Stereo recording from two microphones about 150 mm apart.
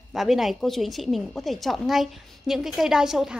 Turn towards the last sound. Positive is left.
turn(degrees=-5)  # may be behind; listen again after turning